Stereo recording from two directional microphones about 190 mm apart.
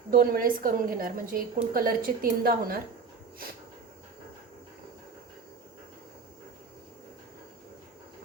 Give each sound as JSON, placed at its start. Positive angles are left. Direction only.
{"t": 0.1, "sound": "a woman's voice", "side_deg": -50}